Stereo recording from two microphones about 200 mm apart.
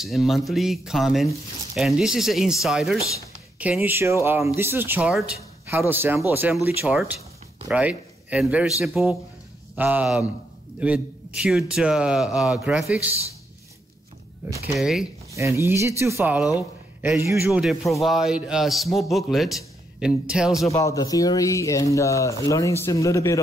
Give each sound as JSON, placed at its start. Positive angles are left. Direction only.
{"t": 0.0, "sound": "a man's voice", "side_deg": 0}
{"t": 14.8, "sound": "a man's voice", "side_deg": 0}
{"t": 15.3, "sound": "a man's voice", "side_deg": -15}
{"t": 20.7, "sound": "speech", "side_deg": 15}